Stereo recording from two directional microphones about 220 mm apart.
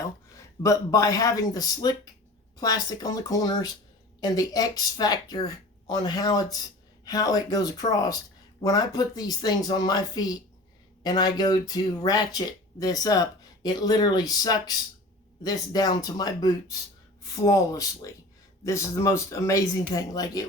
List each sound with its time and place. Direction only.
0.6 s speech: 15° left (ahead or behind)